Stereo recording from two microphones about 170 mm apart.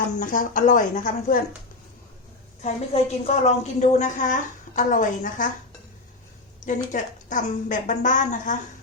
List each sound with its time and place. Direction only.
0.2 s a woman's voice: 50° left (ahead or behind)
2.6 s a woman's voice: 40° left (ahead or behind)
6.9 s a woman's voice: 50° left (ahead or behind)